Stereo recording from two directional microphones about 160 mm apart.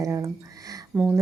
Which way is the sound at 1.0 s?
10° right (ahead or behind).